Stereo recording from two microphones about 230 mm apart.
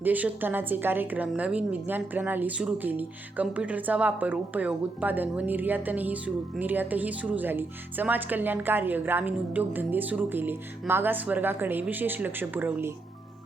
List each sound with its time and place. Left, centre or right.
0.0 s a woman's voice: centre